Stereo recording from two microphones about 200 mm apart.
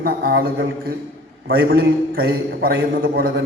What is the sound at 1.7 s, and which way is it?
Speech, 50° right (ahead or behind).